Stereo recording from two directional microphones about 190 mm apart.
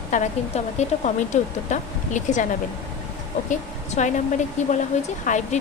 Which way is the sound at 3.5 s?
40° left (ahead or behind).